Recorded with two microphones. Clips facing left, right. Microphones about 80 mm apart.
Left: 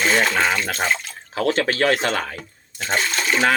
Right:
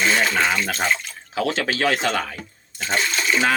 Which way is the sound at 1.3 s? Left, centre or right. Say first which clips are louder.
Left 2 dB; left.